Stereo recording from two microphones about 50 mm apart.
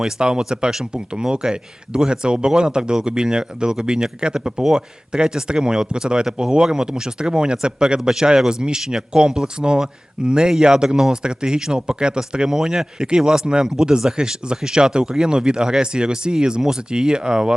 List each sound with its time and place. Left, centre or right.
0.0 s speech: centre